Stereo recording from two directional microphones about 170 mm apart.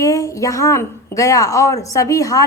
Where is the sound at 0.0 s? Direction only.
20° left (ahead or behind).